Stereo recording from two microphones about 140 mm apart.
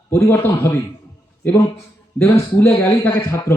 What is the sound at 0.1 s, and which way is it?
Speech, 20° left (ahead or behind).